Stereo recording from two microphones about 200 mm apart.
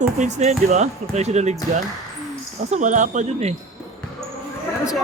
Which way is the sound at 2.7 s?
35° right (ahead or behind).